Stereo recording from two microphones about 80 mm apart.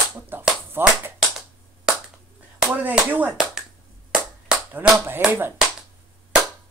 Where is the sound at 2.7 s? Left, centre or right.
Right.